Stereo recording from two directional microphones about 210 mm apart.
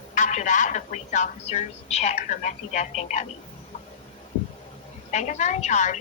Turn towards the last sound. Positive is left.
turn(degrees=35)  # may be behind; listen again after turning